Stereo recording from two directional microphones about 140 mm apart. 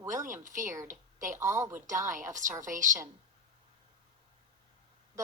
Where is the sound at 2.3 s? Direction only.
65° right (ahead or behind).